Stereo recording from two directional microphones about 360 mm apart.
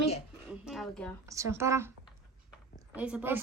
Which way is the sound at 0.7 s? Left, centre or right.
Centre.